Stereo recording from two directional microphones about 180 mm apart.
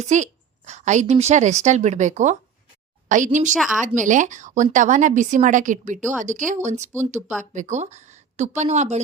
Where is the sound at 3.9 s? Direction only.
45° right (ahead or behind).